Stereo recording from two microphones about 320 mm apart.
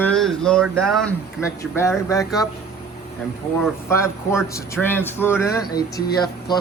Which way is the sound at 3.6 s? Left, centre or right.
Centre.